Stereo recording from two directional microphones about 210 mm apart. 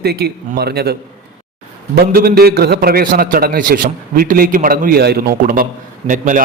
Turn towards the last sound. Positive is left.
turn(degrees=-40)  # may be behind; listen again after turning